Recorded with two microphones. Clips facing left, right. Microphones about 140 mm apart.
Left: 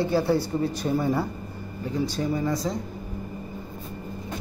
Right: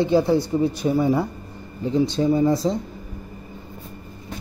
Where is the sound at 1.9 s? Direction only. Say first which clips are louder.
Right 7 dB; 25° right (ahead or behind).